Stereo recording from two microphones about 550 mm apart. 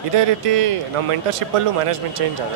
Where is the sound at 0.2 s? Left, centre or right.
Right.